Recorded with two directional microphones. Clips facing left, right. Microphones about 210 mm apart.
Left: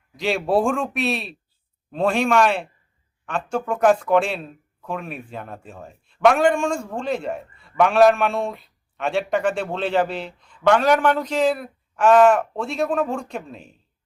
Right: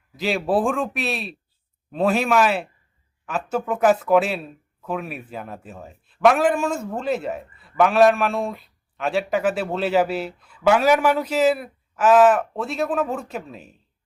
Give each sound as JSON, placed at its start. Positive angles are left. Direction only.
{"t": 0.2, "sound": "speech", "side_deg": 0}